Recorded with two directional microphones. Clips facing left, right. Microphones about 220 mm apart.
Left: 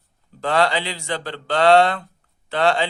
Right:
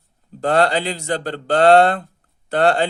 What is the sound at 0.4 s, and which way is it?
Speech, 45° right (ahead or behind).